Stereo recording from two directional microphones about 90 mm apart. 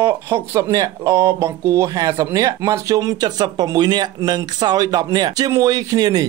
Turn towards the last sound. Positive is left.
turn(degrees=-50)  # may be behind; listen again after turning